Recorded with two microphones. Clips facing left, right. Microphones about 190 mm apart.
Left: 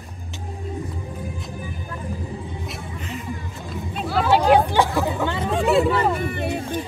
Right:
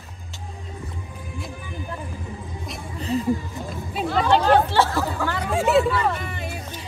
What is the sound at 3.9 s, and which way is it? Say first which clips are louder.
Speech: even; 5° left (ahead or behind).